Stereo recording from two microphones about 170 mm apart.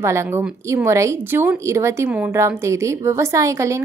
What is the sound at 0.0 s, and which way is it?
A woman's voice, 15° right (ahead or behind).